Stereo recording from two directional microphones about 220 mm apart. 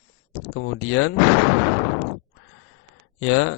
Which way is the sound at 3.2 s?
60° left (ahead or behind).